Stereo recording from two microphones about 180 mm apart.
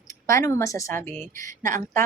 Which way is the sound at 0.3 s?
15° left (ahead or behind).